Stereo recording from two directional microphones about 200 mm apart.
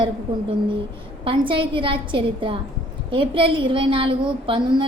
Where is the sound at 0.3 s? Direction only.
25° right (ahead or behind).